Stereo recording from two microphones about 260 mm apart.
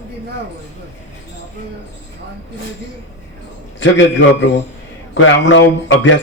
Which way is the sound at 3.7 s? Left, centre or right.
Left.